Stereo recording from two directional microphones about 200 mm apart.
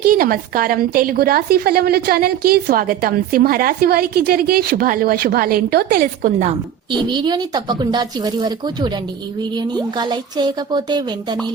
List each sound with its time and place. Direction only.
0.0 s a woman's voice: 45° right (ahead or behind)
7.1 s speech: 20° right (ahead or behind)